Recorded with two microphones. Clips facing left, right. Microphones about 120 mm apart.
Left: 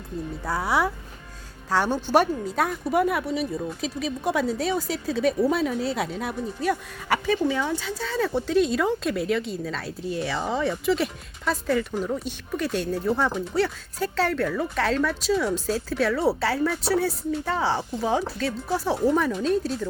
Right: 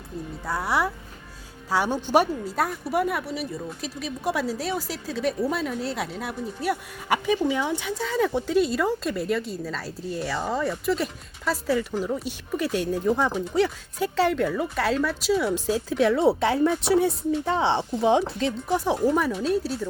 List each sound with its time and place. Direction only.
0.4 s a woman's voice: centre (ahead or behind)
1.7 s speech: 10° right (ahead or behind)
2.9 s a woman's voice: centre (ahead or behind)